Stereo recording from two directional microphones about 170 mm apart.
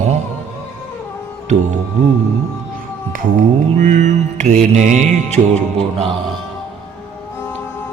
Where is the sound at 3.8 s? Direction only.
45° right (ahead or behind).